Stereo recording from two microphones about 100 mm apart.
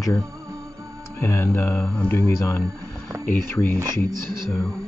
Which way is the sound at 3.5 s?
20° left (ahead or behind).